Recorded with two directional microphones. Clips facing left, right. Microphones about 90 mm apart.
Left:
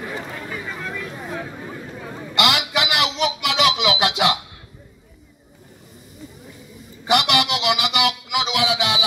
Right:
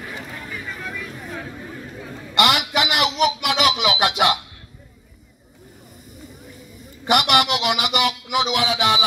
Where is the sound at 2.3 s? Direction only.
45° right (ahead or behind).